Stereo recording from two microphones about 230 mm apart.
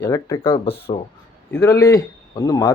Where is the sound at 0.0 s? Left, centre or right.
Centre.